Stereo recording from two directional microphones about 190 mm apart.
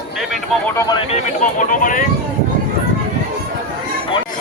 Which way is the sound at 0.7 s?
20° left (ahead or behind).